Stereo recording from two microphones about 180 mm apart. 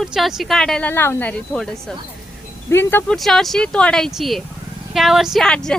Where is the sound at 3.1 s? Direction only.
Centre (ahead or behind).